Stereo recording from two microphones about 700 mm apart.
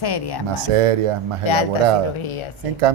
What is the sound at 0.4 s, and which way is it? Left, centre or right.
Speech, right.